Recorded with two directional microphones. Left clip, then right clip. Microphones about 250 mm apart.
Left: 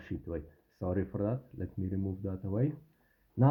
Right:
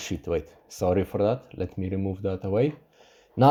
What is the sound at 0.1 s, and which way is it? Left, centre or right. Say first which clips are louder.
Speech: right 11 dB; right.